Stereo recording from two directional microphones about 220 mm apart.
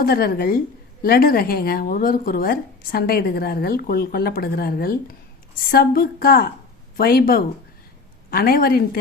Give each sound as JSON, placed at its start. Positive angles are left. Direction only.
{"t": 0.0, "sound": "speech", "side_deg": 40}